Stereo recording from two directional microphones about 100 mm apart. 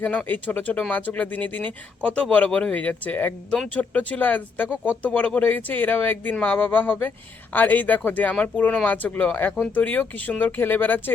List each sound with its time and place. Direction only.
0.0 s speech: 15° left (ahead or behind)